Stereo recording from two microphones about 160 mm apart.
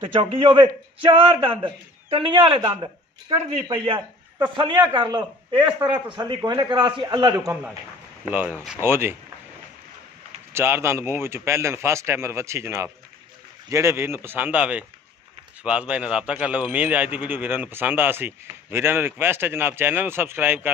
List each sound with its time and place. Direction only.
0.0 s a man's voice: 35° right (ahead or behind)
3.3 s speech: 40° right (ahead or behind)
3.6 s a man's voice: 30° right (ahead or behind)
8.3 s a man's voice: 10° right (ahead or behind)
10.5 s a man's voice: 15° right (ahead or behind)